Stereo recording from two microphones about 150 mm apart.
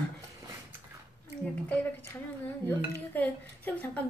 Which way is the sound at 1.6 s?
10° left (ahead or behind).